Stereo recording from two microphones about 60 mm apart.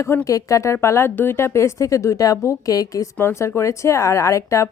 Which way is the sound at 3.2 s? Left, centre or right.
Left.